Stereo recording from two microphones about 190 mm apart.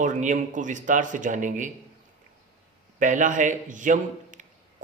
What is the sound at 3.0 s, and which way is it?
Speech, 40° right (ahead or behind).